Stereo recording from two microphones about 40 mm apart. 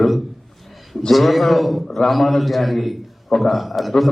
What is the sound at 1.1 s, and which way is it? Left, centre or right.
A man's voice, centre.